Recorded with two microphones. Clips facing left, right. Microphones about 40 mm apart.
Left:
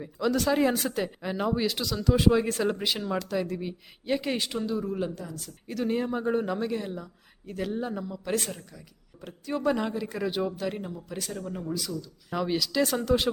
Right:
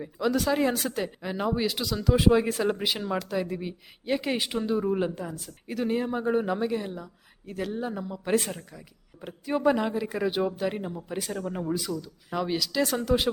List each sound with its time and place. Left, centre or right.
0.0 s speech: centre; by 5.4 s right
5.6 s speech: centre
12.3 s speech: centre